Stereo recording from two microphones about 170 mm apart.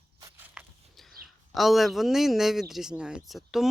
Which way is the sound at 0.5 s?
Centre (ahead or behind).